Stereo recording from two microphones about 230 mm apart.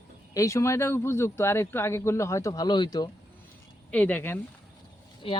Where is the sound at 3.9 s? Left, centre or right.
Centre.